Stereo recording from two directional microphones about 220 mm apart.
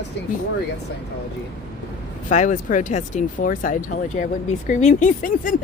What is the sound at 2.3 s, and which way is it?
Speech, 35° left (ahead or behind).